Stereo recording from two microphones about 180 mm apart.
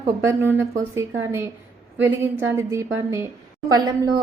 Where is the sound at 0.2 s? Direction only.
10° right (ahead or behind).